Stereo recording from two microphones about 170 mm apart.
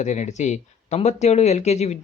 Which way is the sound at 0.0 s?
45° left (ahead or behind).